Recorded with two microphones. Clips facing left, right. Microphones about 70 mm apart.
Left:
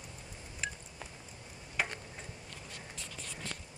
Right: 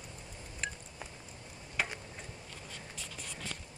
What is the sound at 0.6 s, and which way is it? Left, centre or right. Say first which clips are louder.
Telephone dialing: even; centre.